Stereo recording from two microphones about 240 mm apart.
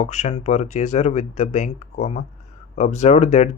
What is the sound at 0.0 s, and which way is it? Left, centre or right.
Speech, left.